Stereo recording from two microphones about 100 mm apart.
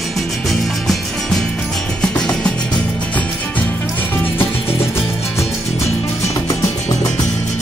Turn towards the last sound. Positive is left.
turn(degrees=30)  # may be behind; listen again after turning